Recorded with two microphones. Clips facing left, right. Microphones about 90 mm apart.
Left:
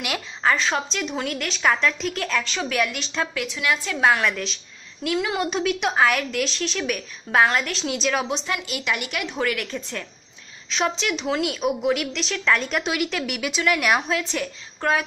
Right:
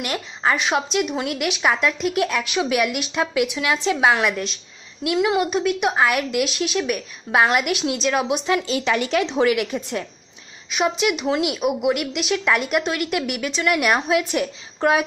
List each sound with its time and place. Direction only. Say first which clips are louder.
0.4 s a woman's voice: right 1 dB; 15° right (ahead or behind)
8.5 s a woman's voice: right 6 dB; 30° right (ahead or behind); by 12.8 s 10° right (ahead or behind)
12.8 s a woman's voice: right 2 dB; centre (ahead or behind); by 15.0 s 20° right (ahead or behind)